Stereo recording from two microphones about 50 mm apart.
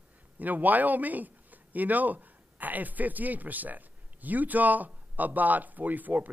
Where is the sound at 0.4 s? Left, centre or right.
Right.